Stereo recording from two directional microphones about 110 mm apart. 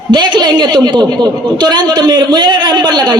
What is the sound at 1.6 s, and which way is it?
A man's voice, 40° right (ahead or behind).